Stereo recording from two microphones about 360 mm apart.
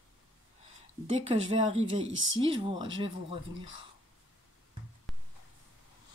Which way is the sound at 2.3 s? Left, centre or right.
Centre.